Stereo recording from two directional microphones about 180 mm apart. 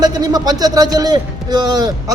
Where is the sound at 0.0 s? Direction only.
20° right (ahead or behind).